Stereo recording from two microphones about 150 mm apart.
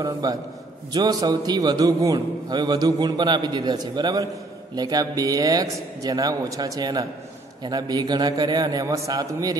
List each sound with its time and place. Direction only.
0.0 s a man's voice: 25° right (ahead or behind)